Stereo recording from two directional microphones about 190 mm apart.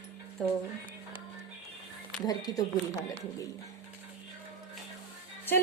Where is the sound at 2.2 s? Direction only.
20° left (ahead or behind).